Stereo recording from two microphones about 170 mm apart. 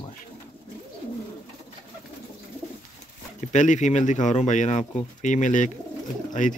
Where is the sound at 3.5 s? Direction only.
45° left (ahead or behind).